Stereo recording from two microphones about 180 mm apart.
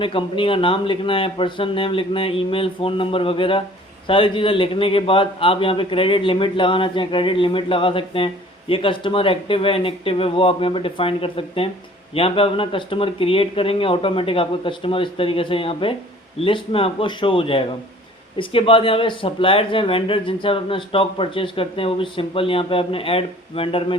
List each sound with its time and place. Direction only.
0.0 s speech: 30° left (ahead or behind)